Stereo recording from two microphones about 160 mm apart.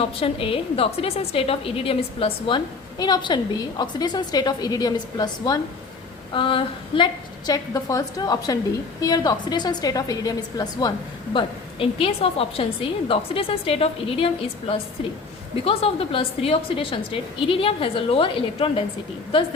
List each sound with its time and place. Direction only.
0.0 s a woman's voice: 35° left (ahead or behind)
11.3 s a woman's voice: 35° left (ahead or behind)
15.6 s a woman's voice: 35° left (ahead or behind)